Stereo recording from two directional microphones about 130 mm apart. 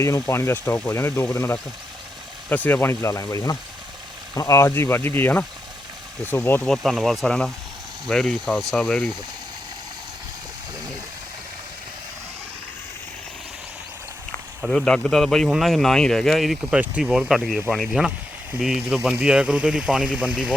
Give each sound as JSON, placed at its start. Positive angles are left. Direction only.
{"t": 0.0, "sound": "speech", "side_deg": 20}
{"t": 6.7, "sound": "speech", "side_deg": 0}
{"t": 14.6, "sound": "speech", "side_deg": 5}